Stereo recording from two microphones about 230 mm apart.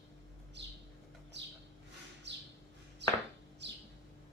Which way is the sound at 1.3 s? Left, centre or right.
Right.